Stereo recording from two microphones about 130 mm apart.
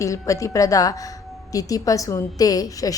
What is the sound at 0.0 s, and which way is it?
A woman's voice, 25° left (ahead or behind).